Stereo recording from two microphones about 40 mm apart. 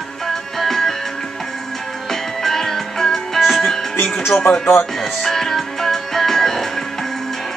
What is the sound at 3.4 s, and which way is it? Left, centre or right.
Music, centre.